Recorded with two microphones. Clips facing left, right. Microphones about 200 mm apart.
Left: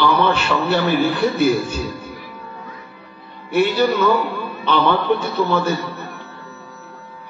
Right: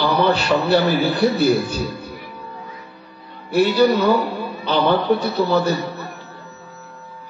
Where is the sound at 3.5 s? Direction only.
35° right (ahead or behind).